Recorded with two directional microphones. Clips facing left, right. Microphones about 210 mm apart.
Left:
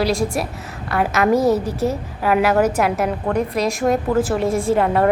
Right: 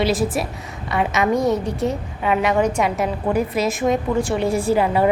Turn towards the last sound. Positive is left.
turn(degrees=0)  # may be behind; listen again after turning